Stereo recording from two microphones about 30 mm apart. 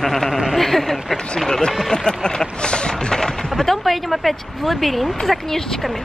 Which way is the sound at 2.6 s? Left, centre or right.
Left.